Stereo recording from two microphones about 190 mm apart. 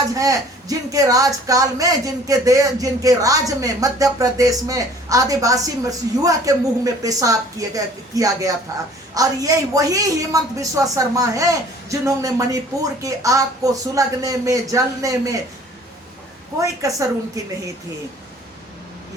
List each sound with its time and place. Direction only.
0.1 s speech: 20° right (ahead or behind)
16.6 s speech: 15° right (ahead or behind)